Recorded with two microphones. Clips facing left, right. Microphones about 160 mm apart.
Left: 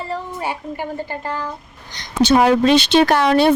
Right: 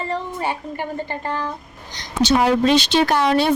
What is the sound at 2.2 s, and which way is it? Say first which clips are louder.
Speech: left 3 dB; 60° left (ahead or behind).